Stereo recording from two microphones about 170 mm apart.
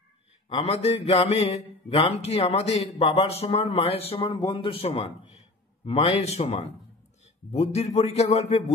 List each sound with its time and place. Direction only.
0.5 s speech: 40° left (ahead or behind)